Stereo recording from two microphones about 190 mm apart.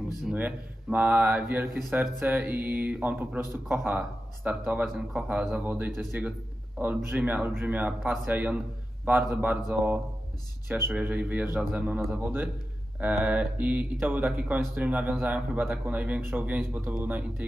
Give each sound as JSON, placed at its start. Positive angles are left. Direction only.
{"t": 0.2, "sound": "speech", "side_deg": -5}